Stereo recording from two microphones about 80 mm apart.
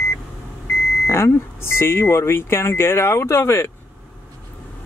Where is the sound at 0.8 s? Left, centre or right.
Centre.